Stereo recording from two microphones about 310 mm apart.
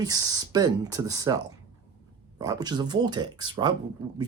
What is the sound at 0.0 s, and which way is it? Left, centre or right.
Speech, centre.